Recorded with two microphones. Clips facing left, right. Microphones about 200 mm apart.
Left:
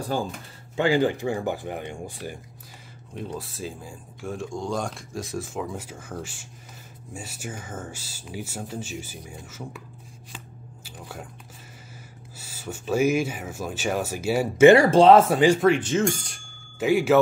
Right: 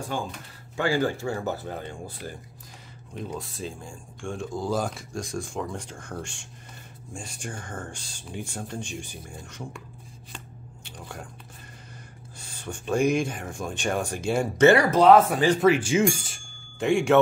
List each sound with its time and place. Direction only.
0.0 s speech: 35° left (ahead or behind)
0.7 s speech: 20° left (ahead or behind)
3.2 s speech: 5° left (ahead or behind)
10.3 s squish: 5° left (ahead or behind)
12.4 s speech: 5° left (ahead or behind)
14.7 s speech: 25° left (ahead or behind)
15.6 s speech: 5° right (ahead or behind)